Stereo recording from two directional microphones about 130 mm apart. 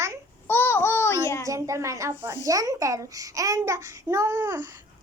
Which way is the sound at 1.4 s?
25° right (ahead or behind).